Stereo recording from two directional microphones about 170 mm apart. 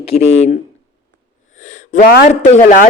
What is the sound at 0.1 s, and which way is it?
A man's voice, 40° left (ahead or behind).